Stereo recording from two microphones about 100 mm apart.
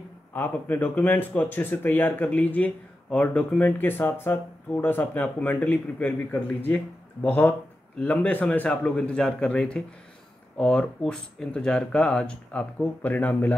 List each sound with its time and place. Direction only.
0.3 s speech: 20° left (ahead or behind)